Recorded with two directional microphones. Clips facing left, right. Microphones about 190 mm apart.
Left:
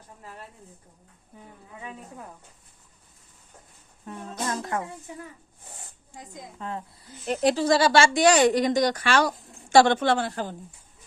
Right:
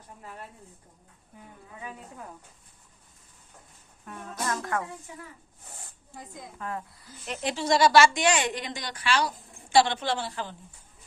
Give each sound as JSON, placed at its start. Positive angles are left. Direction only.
{"t": 4.0, "sound": "speech", "side_deg": 25}
{"t": 6.1, "sound": "speech", "side_deg": 20}
{"t": 7.3, "sound": "a woman's voice", "side_deg": 35}